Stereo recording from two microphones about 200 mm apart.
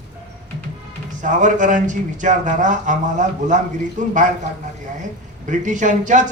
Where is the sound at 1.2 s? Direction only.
40° right (ahead or behind).